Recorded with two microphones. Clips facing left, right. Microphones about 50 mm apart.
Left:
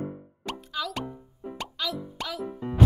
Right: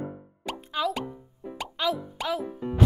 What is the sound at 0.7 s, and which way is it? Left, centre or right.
Speech, right.